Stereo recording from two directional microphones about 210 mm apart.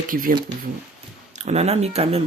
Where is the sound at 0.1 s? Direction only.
40° right (ahead or behind).